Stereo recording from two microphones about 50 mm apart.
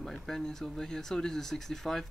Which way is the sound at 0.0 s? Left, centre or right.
Centre.